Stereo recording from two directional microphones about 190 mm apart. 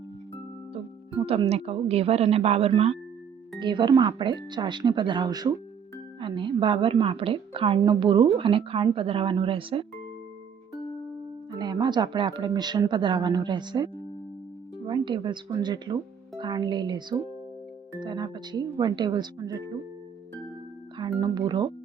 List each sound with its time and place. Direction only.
1.2 s a woman's voice: 30° right (ahead or behind)
11.5 s a woman's voice: 20° right (ahead or behind)
21.2 s a woman's voice: 20° right (ahead or behind)